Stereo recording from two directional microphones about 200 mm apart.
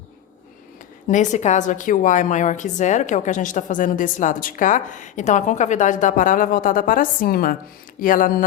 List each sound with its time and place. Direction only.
1.0 s a woman's voice: 40° left (ahead or behind)